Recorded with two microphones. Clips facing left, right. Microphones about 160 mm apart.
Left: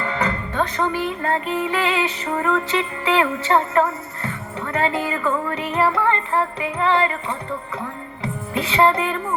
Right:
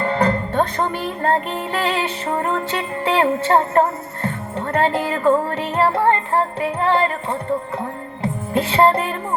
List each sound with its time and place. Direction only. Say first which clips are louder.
0.0 s music: right 5 dB; 35° right (ahead or behind)